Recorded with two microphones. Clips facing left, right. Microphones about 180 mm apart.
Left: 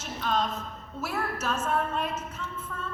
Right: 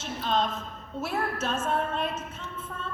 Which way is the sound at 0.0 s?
25° right (ahead or behind).